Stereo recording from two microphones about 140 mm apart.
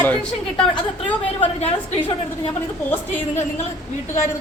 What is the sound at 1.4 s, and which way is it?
Speech, 50° left (ahead or behind).